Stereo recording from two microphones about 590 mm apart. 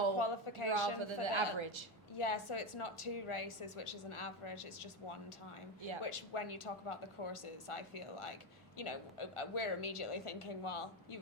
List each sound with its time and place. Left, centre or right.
0.2 s speech: left
0.7 s a man's voice: right
2.1 s a woman's voice: left
6.0 s a woman's voice: left